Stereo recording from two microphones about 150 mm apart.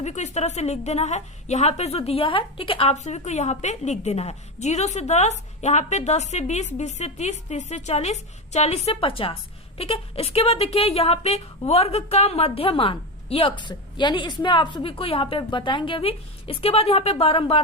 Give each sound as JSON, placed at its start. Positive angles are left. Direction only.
{"t": 0.0, "sound": "a woman's voice", "side_deg": 50}